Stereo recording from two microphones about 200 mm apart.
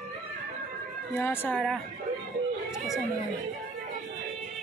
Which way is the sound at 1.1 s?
10° left (ahead or behind).